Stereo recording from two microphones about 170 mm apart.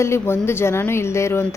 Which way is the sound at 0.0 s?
15° left (ahead or behind).